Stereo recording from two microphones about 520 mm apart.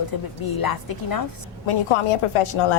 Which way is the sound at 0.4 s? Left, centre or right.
Left.